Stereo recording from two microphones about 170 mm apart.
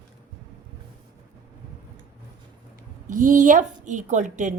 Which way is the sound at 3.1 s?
50° right (ahead or behind).